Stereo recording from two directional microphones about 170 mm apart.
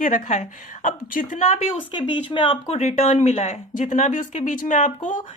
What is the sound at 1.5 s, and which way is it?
Speech, 30° left (ahead or behind).